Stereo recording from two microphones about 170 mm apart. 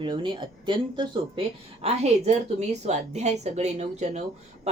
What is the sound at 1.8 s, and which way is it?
A woman's voice, 40° right (ahead or behind).